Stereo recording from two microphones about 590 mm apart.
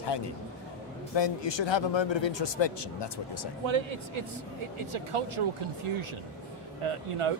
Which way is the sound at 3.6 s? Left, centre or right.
Right.